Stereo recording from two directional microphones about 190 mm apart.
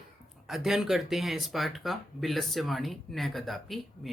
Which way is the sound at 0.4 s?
Centre (ahead or behind).